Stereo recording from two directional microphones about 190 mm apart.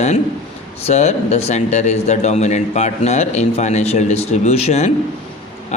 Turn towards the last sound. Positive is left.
turn(degrees=35)  # may be behind; listen again after turning